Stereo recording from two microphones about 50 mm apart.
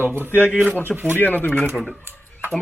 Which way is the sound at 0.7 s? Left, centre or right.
Left.